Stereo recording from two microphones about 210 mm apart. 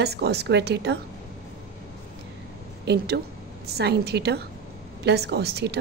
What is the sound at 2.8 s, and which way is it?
A woman's voice, 50° right (ahead or behind).